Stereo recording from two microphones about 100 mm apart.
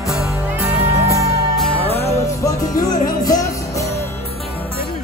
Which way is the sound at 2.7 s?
40° left (ahead or behind).